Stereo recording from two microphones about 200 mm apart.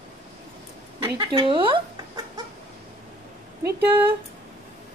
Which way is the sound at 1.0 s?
20° right (ahead or behind).